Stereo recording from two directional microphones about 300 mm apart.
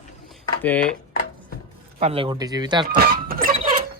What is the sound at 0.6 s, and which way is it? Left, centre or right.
Speech, centre.